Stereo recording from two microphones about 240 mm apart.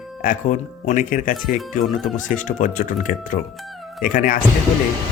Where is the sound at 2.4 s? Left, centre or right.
Left.